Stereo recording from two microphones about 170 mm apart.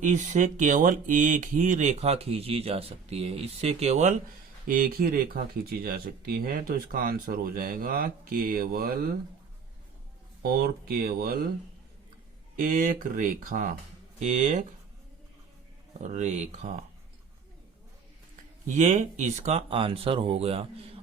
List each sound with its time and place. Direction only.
0.1 s speech: 45° right (ahead or behind)
4.7 s speech: 60° right (ahead or behind)
10.4 s speech: 60° right (ahead or behind)
12.5 s speech: 50° right (ahead or behind)
16.0 s speech: 40° right (ahead or behind)
18.6 s speech: 45° right (ahead or behind)